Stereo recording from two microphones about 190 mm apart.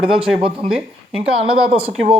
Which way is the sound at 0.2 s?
30° right (ahead or behind).